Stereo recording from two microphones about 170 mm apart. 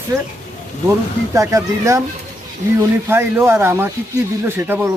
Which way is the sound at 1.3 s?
20° right (ahead or behind).